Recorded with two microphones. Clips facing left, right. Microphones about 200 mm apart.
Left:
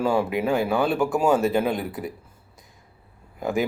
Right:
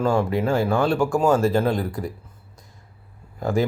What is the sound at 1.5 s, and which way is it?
Speech, 5° left (ahead or behind).